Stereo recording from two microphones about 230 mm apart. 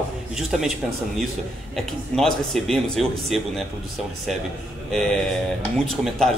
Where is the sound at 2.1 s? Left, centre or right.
Centre.